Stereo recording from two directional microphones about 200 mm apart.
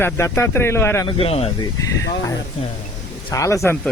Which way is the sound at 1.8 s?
15° left (ahead or behind).